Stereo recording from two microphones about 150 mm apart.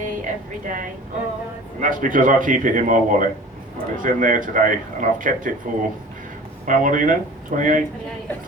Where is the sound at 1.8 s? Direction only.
60° right (ahead or behind).